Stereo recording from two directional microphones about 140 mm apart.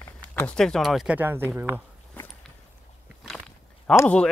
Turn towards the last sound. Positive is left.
turn(degrees=5)  # may be behind; listen again after turning